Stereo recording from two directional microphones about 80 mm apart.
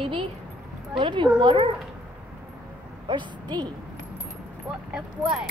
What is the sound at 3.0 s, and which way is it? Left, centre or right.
Speech, right.